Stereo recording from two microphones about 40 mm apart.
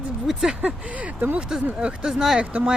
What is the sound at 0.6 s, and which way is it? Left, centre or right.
Speech, right.